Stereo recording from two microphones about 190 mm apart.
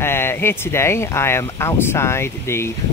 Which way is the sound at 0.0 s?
10° left (ahead or behind).